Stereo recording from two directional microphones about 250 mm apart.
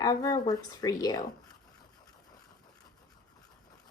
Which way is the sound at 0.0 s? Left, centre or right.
Centre.